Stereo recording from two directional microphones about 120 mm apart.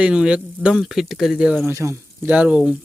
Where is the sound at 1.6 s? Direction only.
25° right (ahead or behind).